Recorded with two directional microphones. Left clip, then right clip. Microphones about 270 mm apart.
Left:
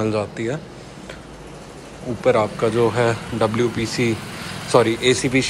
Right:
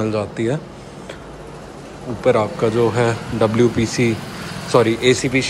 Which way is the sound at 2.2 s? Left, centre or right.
Centre.